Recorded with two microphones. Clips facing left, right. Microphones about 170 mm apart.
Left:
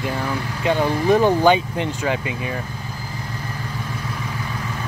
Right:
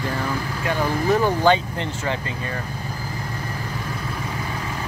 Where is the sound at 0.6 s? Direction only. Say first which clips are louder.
Left 4 dB; 20° left (ahead or behind).